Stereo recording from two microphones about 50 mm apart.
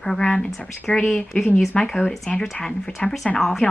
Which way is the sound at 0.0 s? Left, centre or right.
Centre.